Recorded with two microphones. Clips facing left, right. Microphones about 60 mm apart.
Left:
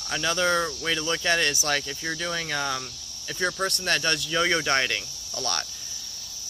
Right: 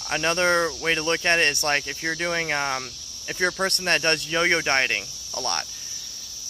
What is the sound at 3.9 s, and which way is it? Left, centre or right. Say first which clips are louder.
Speech: right 4 dB; right.